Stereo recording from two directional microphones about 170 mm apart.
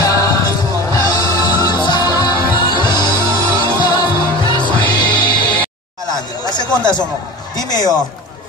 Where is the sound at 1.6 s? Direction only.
25° left (ahead or behind).